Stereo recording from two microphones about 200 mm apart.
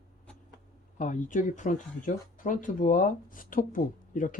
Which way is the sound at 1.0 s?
40° left (ahead or behind).